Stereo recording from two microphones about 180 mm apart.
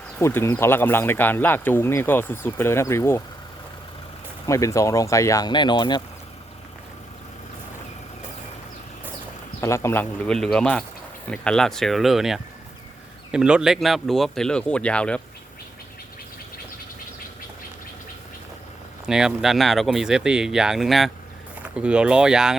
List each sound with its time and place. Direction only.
0.2 s speech: 15° left (ahead or behind)
4.4 s speech: 15° left (ahead or behind)
9.6 s speech: 15° left (ahead or behind)
19.0 s speech: 5° right (ahead or behind)